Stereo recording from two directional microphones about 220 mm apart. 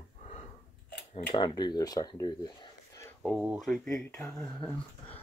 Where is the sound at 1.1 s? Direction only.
20° left (ahead or behind).